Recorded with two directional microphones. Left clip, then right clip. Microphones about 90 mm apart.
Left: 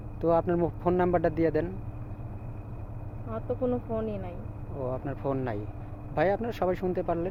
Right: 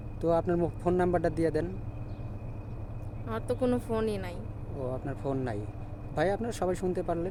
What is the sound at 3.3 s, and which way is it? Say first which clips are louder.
Speech: even; 70° right (ahead or behind).